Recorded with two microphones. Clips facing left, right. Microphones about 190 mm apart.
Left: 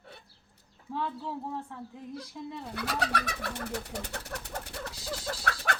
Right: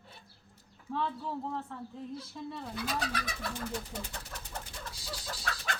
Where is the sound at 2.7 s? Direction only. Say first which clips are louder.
Left 4 dB; 70° left (ahead or behind).